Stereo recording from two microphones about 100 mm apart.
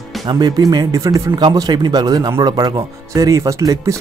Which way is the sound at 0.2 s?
40° right (ahead or behind).